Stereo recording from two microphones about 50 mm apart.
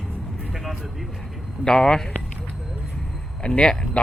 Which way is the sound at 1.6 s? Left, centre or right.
Centre.